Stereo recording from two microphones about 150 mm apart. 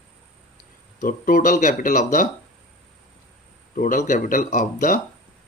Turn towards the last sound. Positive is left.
turn(degrees=60)  # may be behind; listen again after turning